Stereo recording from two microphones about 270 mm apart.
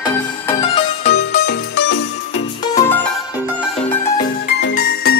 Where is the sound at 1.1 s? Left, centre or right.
Left.